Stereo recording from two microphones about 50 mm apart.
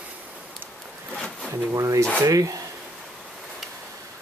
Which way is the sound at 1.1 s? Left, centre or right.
Centre.